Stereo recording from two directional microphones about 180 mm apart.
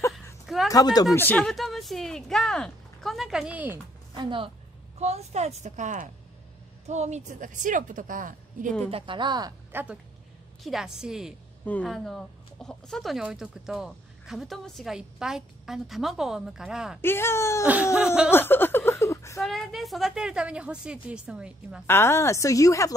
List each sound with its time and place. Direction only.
0.7 s speech: 20° left (ahead or behind)
1.1 s speech: 10° left (ahead or behind); by 3.8 s 10° right (ahead or behind)
4.1 s a woman's voice: 25° right (ahead or behind); by 8.7 s 45° right (ahead or behind)
8.9 s a woman's voice: 30° right (ahead or behind)
9.7 s a woman's voice: 10° right (ahead or behind)
11.6 s speech: 10° left (ahead or behind)
17.0 s speech: 15° left (ahead or behind)
17.9 s speech: 5° right (ahead or behind)
18.3 s a sound: 10° left (ahead or behind)
19.4 s speech: centre (ahead or behind)
21.8 s speech: 15° left (ahead or behind)